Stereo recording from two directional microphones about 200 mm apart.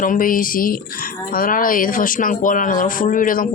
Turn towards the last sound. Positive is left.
turn(degrees=40)  # may be behind; listen again after turning